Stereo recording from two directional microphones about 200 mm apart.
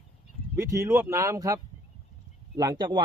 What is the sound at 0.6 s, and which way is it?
Speech, 15° right (ahead or behind).